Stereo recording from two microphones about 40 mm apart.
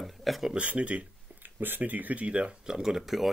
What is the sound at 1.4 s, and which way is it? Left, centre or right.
Speech, right.